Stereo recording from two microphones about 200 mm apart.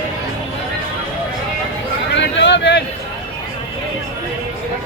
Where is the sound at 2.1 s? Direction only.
65° left (ahead or behind).